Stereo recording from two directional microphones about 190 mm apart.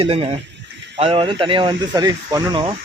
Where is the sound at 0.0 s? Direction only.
30° right (ahead or behind).